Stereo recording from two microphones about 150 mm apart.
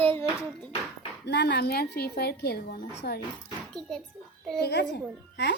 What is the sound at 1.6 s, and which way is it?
A woman's voice, 90° left.